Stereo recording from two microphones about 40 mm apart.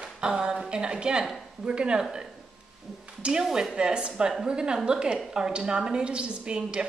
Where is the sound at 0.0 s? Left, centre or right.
Right.